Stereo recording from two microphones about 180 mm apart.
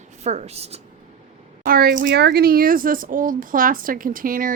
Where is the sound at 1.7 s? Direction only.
55° right (ahead or behind).